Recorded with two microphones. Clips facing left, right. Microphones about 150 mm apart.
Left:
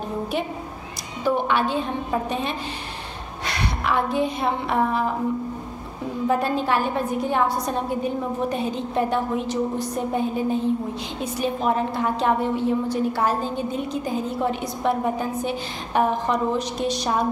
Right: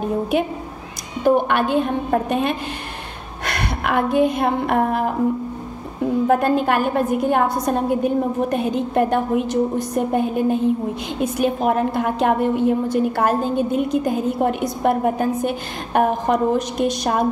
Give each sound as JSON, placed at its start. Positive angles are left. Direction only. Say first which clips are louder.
{"t": 1.2, "sound": "a woman's voice", "louder": "right 5 dB", "side_deg": -55}
{"t": 6.2, "sound": "a woman's voice", "louder": "right 3 dB", "side_deg": -55}